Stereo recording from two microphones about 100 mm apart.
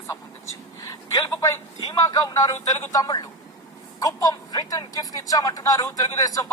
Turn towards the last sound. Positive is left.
turn(degrees=35)  # may be behind; listen again after turning